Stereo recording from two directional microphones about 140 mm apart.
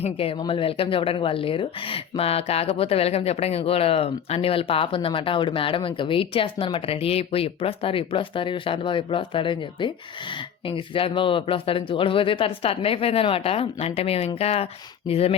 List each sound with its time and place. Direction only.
0.0 s a woman's voice: 40° left (ahead or behind)